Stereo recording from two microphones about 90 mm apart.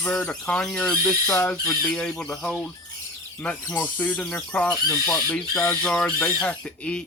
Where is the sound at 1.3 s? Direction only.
25° left (ahead or behind).